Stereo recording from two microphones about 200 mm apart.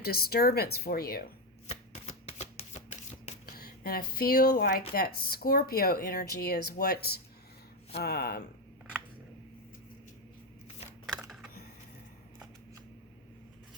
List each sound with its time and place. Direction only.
0.0 s speech: 50° left (ahead or behind)
1.6 s shuffling cards: 30° left (ahead or behind); by 4.8 s 50° left (ahead or behind)
4.9 s speech: 50° left (ahead or behind)
11.0 s typing: 5° right (ahead or behind)